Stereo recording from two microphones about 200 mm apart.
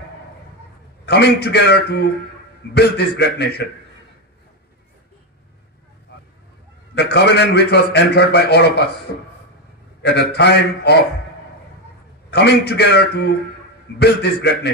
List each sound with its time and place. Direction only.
1.0 s a man's voice: 55° left (ahead or behind)
6.1 s vehicle: 55° left (ahead or behind)
7.0 s a man's voice: 55° left (ahead or behind)
12.3 s a man's voice: 55° left (ahead or behind)